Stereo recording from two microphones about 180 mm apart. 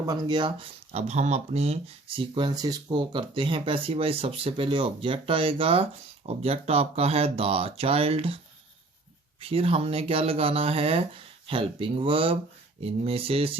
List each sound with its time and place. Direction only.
0.0 s speech: 20° right (ahead or behind)
9.4 s speech: 30° right (ahead or behind)